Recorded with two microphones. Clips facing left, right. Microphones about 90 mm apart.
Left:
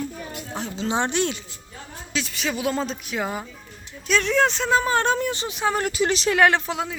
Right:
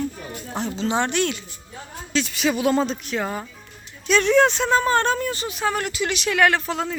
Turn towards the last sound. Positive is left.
turn(degrees=10)  # may be behind; listen again after turning